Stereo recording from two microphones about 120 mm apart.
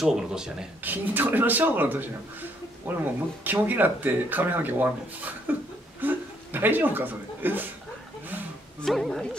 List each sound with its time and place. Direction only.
0.0 s speech: 5° right (ahead or behind)
5.9 s a sound: 15° right (ahead or behind)
8.8 s speech: centre (ahead or behind)